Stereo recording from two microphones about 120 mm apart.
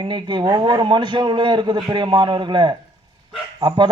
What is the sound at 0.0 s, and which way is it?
A man's voice, 40° right (ahead or behind).